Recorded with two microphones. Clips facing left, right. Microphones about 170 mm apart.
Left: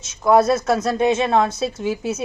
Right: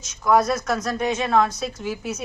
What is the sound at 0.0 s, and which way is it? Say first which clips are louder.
Speech: left 4 dB; 25° left (ahead or behind).